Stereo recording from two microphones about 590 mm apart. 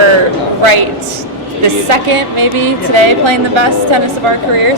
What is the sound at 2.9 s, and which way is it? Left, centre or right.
Speech, right.